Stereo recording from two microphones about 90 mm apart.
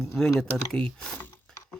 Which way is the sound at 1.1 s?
20° left (ahead or behind).